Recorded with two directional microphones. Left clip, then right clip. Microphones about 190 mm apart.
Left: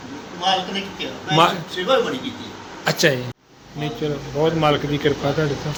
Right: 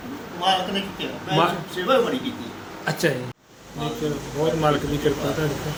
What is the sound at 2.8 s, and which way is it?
Speech, 30° left (ahead or behind).